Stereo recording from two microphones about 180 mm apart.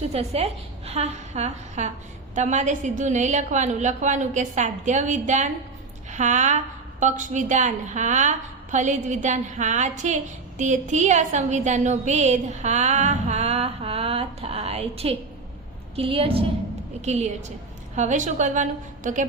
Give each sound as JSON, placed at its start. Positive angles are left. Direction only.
{"t": 0.1, "sound": "a woman's voice", "side_deg": -35}